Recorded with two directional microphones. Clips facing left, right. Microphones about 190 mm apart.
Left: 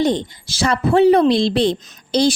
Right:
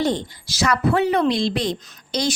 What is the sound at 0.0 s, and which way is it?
Speech, 20° left (ahead or behind).